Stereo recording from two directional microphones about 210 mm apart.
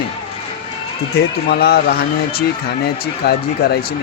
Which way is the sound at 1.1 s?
50° left (ahead or behind).